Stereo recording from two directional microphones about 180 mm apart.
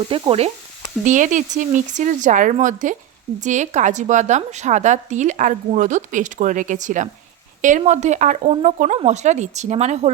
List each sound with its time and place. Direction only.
0.1 s speech: 35° right (ahead or behind)
1.0 s a woman's voice: 45° right (ahead or behind)